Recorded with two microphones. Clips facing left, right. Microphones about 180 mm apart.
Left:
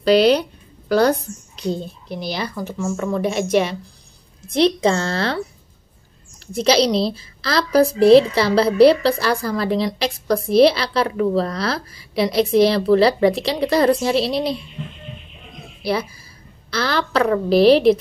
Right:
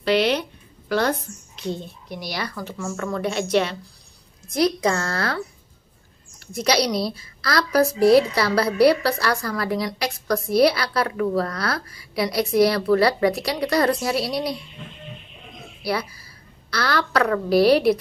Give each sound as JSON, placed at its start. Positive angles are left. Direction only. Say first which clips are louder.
{"t": 0.0, "sound": "a sound", "louder": "left 6 dB", "side_deg": 35}
{"t": 1.6, "sound": "a woman's voice", "louder": "left 5 dB", "side_deg": 35}
{"t": 4.5, "sound": "a woman's voice", "louder": "left 4 dB", "side_deg": 30}
{"t": 6.4, "sound": "a woman's voice", "louder": "left 5 dB", "side_deg": 25}
{"t": 15.8, "sound": "a woman's voice", "louder": "left 4 dB", "side_deg": 25}